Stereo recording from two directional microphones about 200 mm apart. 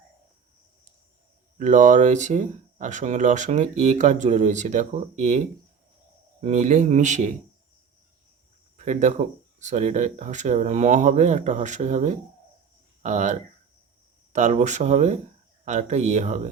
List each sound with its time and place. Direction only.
1.5 s speech: 40° right (ahead or behind)
6.4 s speech: 35° right (ahead or behind)
8.8 s speech: 35° right (ahead or behind)